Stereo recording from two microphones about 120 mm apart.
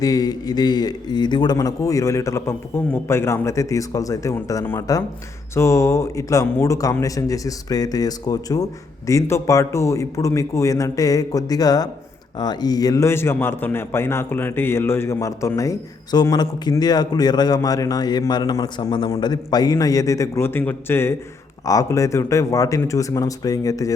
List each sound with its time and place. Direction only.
0.0 s a man's voice: 30° left (ahead or behind)